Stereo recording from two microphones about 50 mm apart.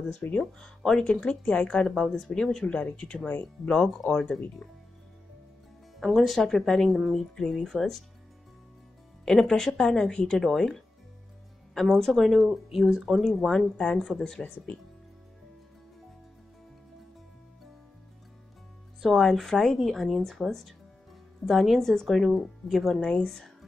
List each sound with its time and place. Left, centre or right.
0.4 s speech: centre
1.8 s speech: centre
2.6 s speech: left
5.9 s speech: centre
9.2 s speech: centre
18.9 s speech: centre